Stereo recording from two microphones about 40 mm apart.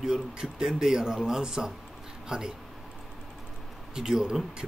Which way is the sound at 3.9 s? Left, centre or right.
Centre.